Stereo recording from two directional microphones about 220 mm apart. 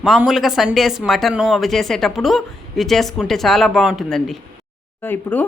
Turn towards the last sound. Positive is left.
turn(degrees=10)  # may be behind; listen again after turning